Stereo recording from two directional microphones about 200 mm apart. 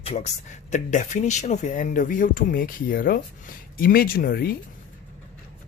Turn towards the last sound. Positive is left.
turn(degrees=50)  # may be behind; listen again after turning